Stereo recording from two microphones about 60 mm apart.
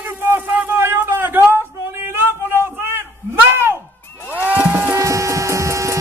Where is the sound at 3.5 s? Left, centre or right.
Right.